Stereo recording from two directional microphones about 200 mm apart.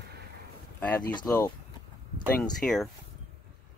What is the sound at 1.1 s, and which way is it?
Speech, 15° left (ahead or behind).